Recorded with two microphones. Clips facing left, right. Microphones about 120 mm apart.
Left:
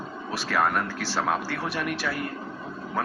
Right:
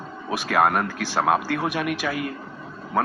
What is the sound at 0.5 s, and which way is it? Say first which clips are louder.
Speech: right 4 dB; 55° right (ahead or behind).